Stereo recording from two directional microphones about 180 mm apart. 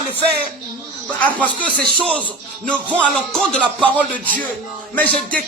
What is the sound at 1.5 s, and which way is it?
Speech, 50° right (ahead or behind).